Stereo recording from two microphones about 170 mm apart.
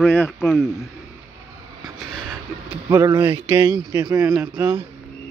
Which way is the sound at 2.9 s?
15° right (ahead or behind).